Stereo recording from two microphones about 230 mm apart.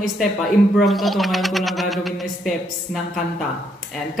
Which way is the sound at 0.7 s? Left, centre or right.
Centre.